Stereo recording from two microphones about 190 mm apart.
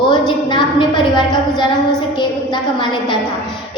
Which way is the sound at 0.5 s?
25° left (ahead or behind).